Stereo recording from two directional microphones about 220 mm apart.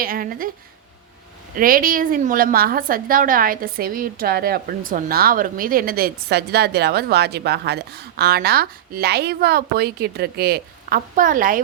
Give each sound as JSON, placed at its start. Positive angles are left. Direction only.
{"t": 0.0, "sound": "speech", "side_deg": -40}
{"t": 1.5, "sound": "a woman's voice", "side_deg": -40}